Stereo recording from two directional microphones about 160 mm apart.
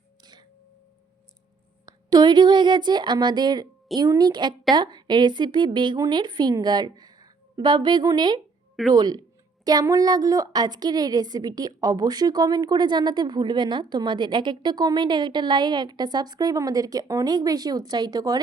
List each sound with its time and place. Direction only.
1.9 s a woman's voice: 25° right (ahead or behind)